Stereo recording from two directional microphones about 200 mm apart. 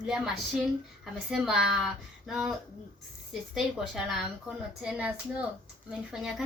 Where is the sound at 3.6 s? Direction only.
Centre (ahead or behind).